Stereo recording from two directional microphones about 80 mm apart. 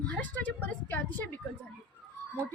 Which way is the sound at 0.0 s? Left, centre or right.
Centre.